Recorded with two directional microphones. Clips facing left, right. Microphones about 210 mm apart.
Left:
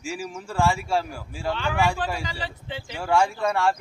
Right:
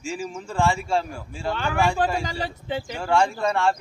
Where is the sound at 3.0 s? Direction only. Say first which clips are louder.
Even; 10° left (ahead or behind).